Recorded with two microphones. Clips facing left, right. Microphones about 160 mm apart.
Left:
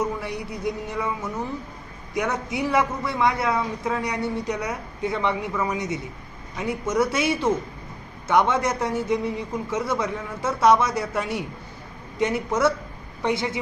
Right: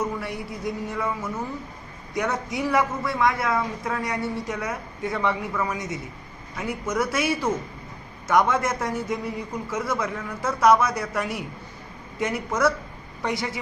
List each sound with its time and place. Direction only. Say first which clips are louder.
0.2 s a man's voice: left 1 dB; 20° left (ahead or behind)